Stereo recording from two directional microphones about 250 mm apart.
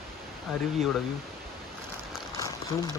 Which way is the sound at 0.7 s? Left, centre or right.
Centre.